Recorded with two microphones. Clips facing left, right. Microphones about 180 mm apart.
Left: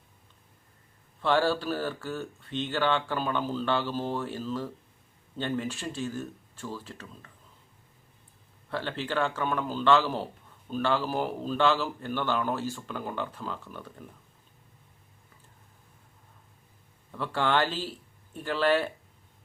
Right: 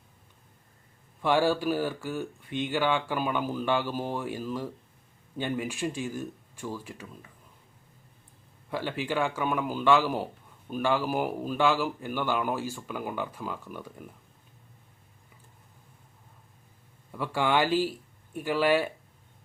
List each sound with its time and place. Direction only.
1.2 s speech: 10° right (ahead or behind)
8.7 s speech: 10° right (ahead or behind)
17.1 s speech: 10° right (ahead or behind)